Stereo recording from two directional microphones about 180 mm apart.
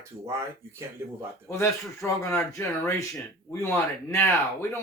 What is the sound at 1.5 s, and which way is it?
Speech, 15° left (ahead or behind).